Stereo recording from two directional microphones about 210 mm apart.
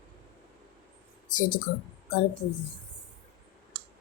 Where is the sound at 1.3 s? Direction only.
40° left (ahead or behind).